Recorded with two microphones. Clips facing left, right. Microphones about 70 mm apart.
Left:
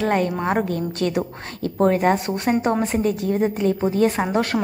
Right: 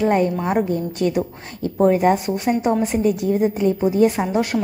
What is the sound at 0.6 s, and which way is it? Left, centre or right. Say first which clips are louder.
A woman's voice: right 2 dB; centre.